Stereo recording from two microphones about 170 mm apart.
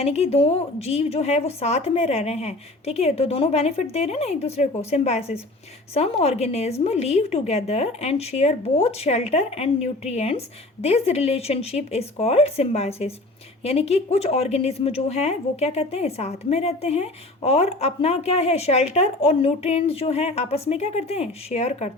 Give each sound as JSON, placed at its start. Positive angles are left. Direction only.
{"t": 0.0, "sound": "a woman's voice", "side_deg": 35}